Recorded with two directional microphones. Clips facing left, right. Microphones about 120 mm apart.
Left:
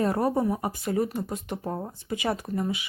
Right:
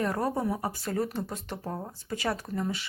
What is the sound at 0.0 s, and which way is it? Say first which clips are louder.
Speech: left 4 dB; 25° left (ahead or behind).